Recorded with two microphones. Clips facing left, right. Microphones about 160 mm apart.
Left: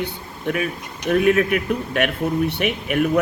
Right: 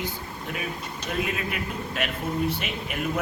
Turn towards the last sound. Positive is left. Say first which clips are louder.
# left 10 dB
turn(degrees=65)  # may be behind; listen again after turning